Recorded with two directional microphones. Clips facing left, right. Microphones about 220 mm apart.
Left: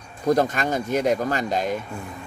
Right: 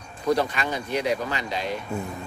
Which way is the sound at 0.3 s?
45° left (ahead or behind).